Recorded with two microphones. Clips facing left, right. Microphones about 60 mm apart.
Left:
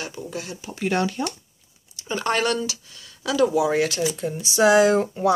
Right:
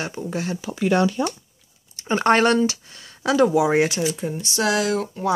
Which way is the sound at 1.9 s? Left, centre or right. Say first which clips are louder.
Right 6 dB; right.